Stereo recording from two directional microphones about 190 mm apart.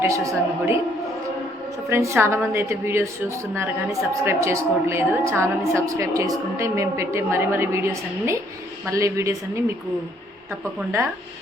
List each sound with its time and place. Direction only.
0.0 s a woman's voice: 15° right (ahead or behind)
1.9 s a woman's voice: 15° right (ahead or behind)